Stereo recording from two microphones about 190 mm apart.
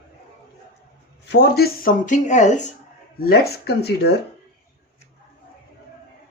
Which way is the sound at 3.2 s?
55° left (ahead or behind).